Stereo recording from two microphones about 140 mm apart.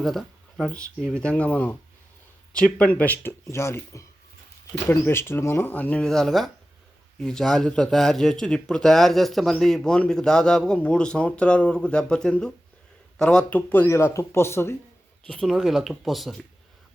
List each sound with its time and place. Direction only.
0.0 s a man's voice: centre (ahead or behind); by 14.8 s 15° left (ahead or behind)
15.3 s a man's voice: 5° left (ahead or behind)